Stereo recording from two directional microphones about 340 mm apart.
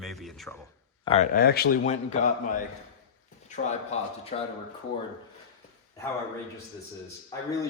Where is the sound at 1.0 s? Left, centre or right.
Centre.